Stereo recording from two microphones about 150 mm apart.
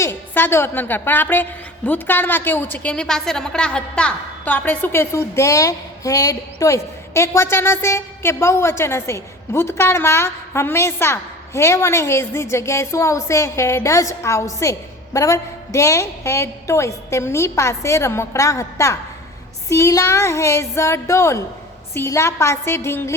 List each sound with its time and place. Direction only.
0.0 s a woman's voice: 15° left (ahead or behind)